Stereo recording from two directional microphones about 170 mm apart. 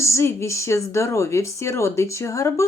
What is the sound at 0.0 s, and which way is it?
A woman's voice, 15° left (ahead or behind).